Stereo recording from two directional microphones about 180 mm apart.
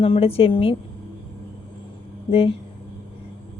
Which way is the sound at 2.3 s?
30° left (ahead or behind).